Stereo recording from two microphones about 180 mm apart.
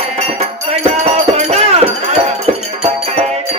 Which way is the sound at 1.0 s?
35° right (ahead or behind).